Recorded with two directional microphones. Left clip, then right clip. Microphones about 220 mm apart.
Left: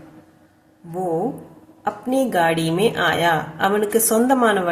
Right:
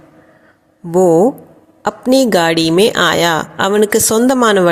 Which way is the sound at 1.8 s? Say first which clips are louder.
Right 9 dB; 40° right (ahead or behind).